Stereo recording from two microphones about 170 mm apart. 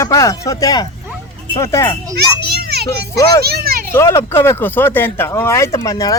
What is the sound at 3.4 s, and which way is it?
Speech, 65° right (ahead or behind).